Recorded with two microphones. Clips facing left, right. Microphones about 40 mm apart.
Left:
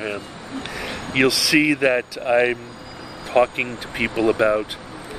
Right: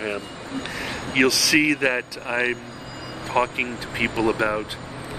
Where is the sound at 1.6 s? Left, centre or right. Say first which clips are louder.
Left 3 dB; centre.